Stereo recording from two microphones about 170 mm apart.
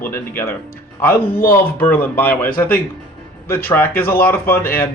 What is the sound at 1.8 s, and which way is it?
Speech, 10° left (ahead or behind).